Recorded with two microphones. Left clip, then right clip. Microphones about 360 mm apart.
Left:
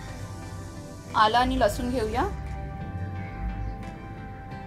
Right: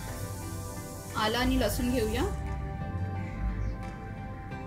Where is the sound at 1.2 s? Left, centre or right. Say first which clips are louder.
Left 9 dB; left.